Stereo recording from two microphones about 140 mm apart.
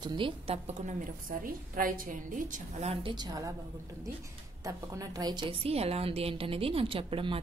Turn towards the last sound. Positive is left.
turn(degrees=-40)  # may be behind; listen again after turning